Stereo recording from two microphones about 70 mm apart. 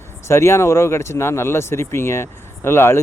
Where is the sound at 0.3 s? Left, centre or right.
Left.